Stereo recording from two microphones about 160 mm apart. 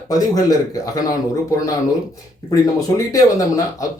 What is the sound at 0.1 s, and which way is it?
Speech, 20° left (ahead or behind).